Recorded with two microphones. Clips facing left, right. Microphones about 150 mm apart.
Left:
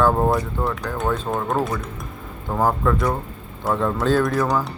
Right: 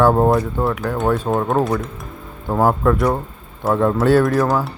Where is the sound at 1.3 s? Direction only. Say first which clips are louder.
Right 5 dB; 20° right (ahead or behind); by 4.7 s 5° right (ahead or behind).